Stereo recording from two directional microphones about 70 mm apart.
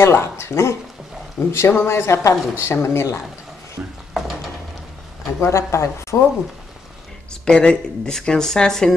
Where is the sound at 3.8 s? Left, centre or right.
Centre.